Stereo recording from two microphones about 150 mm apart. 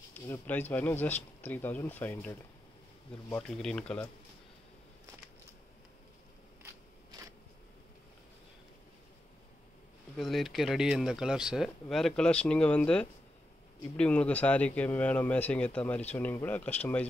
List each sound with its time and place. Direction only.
0.1 s speech: 10° left (ahead or behind)
6.6 s crackle: 20° right (ahead or behind)
10.1 s speech: centre (ahead or behind)